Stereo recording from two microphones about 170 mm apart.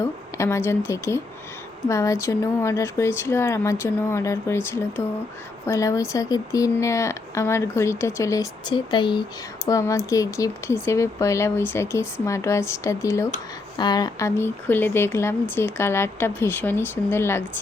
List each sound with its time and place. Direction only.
0.0 s speech: 15° left (ahead or behind)